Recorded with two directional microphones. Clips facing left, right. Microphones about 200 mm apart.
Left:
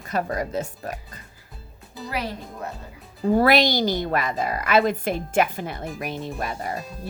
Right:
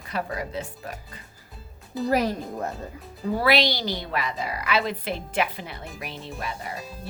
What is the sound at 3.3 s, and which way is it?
A woman's voice, 45° left (ahead or behind).